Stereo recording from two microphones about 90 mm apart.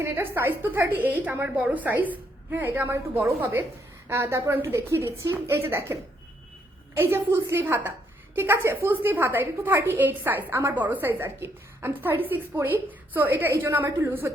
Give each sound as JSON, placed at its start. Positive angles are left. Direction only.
{"t": 0.0, "sound": "a woman's voice", "side_deg": -25}